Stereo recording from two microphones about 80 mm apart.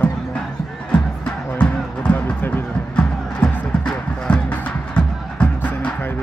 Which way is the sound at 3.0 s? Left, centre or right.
Centre.